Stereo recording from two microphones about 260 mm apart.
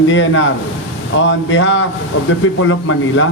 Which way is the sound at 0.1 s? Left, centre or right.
Left.